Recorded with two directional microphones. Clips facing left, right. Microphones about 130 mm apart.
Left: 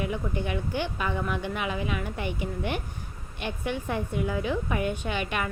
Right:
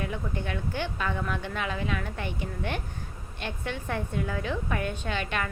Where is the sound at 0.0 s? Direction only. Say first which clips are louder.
Left 3 dB; 15° left (ahead or behind).